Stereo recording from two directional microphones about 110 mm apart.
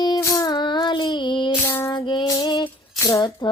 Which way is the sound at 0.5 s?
45° left (ahead or behind).